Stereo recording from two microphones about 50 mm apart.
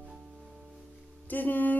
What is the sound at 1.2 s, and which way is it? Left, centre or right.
Music, left.